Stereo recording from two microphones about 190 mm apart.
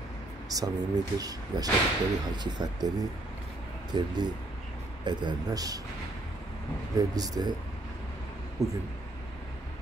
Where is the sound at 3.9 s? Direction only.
25° right (ahead or behind).